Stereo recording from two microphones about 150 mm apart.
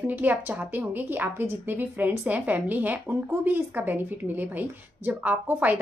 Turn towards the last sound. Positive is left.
turn(degrees=-10)  # may be behind; listen again after turning